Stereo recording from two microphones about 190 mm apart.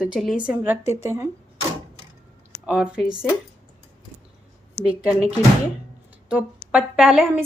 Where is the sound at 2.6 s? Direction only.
5° right (ahead or behind).